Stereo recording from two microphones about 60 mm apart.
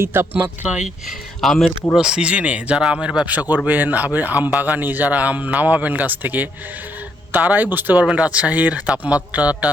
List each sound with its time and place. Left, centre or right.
0.0 s speech: right
0.3 s a man's voice: right
1.4 s speech: centre
2.0 s a man's voice: centre; by 8.0 s right
8.1 s a man's voice: right